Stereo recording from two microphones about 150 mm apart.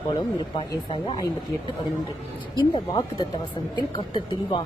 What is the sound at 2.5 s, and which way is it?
Speech, 30° left (ahead or behind).